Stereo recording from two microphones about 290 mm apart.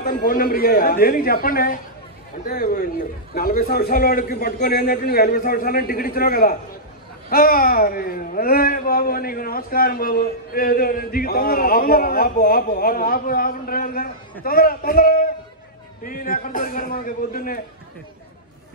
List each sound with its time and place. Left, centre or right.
0.0 s a man's voice: left